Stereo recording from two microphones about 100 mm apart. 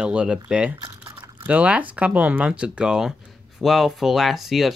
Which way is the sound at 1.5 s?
15° right (ahead or behind).